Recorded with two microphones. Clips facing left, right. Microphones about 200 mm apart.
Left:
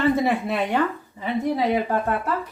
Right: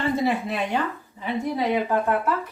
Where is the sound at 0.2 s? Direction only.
60° left (ahead or behind).